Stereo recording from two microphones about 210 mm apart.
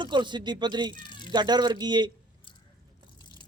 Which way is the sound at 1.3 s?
20° right (ahead or behind).